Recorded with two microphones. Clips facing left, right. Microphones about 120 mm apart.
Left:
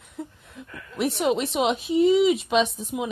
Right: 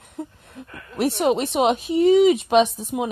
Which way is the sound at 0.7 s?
55° right (ahead or behind).